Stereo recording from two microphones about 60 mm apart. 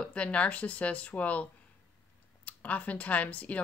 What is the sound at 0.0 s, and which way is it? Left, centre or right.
Speech, centre.